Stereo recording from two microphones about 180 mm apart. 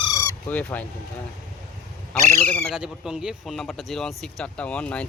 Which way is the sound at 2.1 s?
5° left (ahead or behind).